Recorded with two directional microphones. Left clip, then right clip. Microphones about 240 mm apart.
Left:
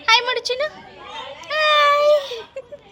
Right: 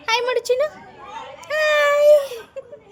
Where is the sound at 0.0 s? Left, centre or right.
Right.